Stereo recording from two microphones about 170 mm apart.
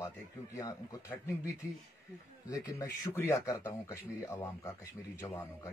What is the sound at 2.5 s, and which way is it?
Speech, 20° left (ahead or behind).